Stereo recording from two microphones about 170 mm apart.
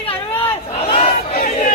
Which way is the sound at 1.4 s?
45° left (ahead or behind).